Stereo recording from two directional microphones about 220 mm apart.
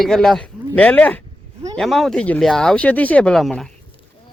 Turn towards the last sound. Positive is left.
turn(degrees=0)  # may be behind; listen again after turning